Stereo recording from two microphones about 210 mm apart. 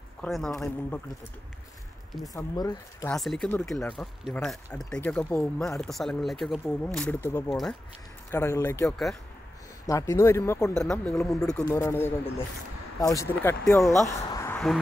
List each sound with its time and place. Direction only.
0.2 s speech: centre (ahead or behind)
2.3 s speech: 15° left (ahead or behind)
3.1 s speech: 5° left (ahead or behind)
8.3 s speech: 15° left (ahead or behind)
8.8 s speech: centre (ahead or behind)
9.8 s speech: 15° left (ahead or behind)
14.2 s a sound: 15° left (ahead or behind)